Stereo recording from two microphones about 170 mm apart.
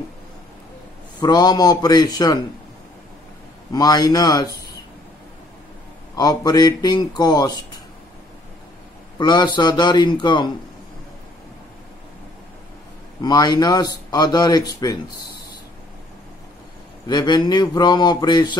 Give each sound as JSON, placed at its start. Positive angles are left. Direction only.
{"t": 1.2, "sound": "speech", "side_deg": 25}
{"t": 3.7, "sound": "speech", "side_deg": 20}
{"t": 6.1, "sound": "speech", "side_deg": 25}
{"t": 9.2, "sound": "speech", "side_deg": 25}
{"t": 13.2, "sound": "speech", "side_deg": 25}
{"t": 17.1, "sound": "speech", "side_deg": 25}